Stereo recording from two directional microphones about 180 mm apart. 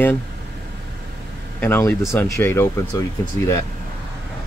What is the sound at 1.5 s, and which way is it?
Speech, 10° left (ahead or behind).